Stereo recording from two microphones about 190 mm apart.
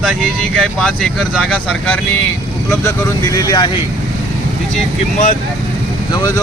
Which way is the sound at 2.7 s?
15° left (ahead or behind).